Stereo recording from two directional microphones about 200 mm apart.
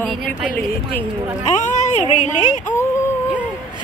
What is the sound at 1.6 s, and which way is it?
Speech, 35° left (ahead or behind).